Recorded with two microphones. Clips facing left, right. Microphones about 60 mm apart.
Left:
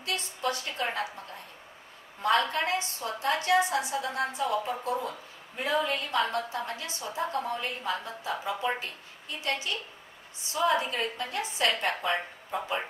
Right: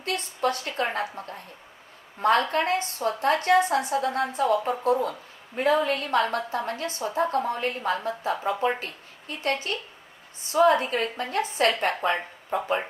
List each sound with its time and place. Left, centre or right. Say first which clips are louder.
0.0 s a woman's voice: right 5 dB; right